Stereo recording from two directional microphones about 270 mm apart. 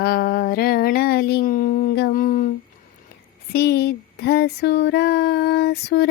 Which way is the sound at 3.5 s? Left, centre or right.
Left.